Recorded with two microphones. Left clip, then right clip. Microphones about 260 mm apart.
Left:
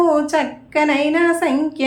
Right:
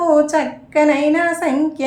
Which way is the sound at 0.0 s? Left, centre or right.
Centre.